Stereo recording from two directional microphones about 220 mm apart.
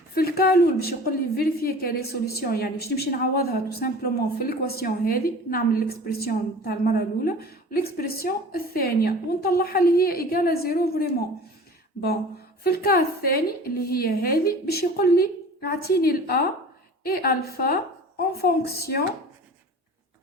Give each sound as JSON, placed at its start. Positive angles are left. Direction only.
{"t": 0.1, "sound": "a woman's voice", "side_deg": 45}
{"t": 12.6, "sound": "a woman's voice", "side_deg": 45}